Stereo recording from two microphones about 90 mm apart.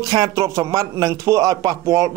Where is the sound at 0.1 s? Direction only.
45° right (ahead or behind).